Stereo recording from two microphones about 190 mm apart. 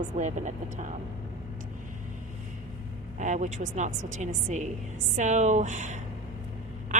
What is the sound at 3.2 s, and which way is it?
A woman's voice, 40° right (ahead or behind).